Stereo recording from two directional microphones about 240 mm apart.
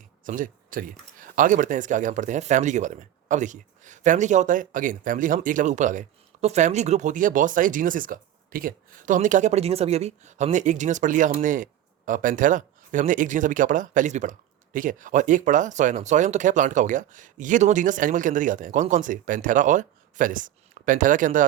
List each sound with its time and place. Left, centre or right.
0.3 s speech: right